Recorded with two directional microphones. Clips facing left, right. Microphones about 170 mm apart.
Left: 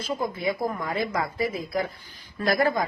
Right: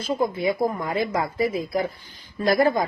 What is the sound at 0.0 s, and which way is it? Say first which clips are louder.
A woman's voice: right 4 dB; 25° right (ahead or behind).